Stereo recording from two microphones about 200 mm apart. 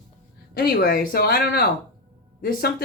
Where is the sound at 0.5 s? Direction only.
50° left (ahead or behind).